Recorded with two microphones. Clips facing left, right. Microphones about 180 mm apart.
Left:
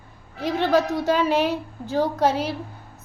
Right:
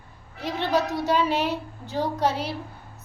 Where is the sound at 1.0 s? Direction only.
50° left (ahead or behind).